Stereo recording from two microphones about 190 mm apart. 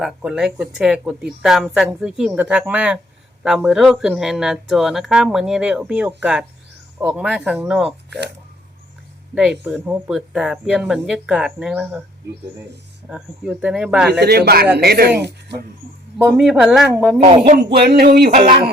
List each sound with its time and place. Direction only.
0.0 s speech: 5° right (ahead or behind)
9.3 s speech: 5° right (ahead or behind)
13.1 s speech: 5° right (ahead or behind)
14.1 s a sound: 60° right (ahead or behind)
16.4 s speech: centre (ahead or behind)
17.6 s a sound: 55° right (ahead or behind)